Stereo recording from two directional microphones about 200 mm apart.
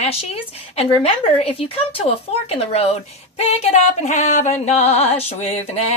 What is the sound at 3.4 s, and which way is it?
Music, 35° left (ahead or behind).